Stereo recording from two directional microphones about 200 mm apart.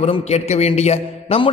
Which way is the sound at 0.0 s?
30° left (ahead or behind).